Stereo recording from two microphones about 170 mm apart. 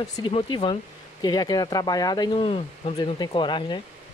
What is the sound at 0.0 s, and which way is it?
Speech, 30° left (ahead or behind).